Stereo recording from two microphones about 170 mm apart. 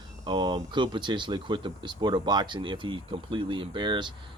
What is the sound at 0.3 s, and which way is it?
Speech, 25° right (ahead or behind).